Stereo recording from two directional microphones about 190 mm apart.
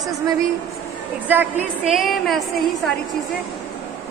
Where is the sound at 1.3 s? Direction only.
5° right (ahead or behind).